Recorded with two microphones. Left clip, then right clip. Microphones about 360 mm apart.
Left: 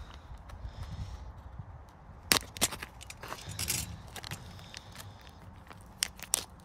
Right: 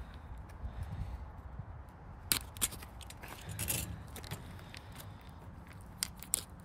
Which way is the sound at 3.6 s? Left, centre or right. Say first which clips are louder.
Left 4 dB; centre.